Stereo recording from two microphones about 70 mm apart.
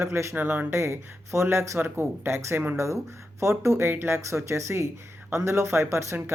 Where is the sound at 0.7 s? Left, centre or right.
Right.